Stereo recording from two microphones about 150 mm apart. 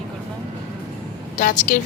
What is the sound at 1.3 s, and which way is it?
Speech, 60° left (ahead or behind).